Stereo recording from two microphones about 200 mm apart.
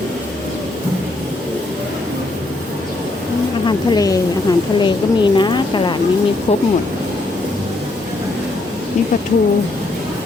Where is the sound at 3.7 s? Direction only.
20° left (ahead or behind).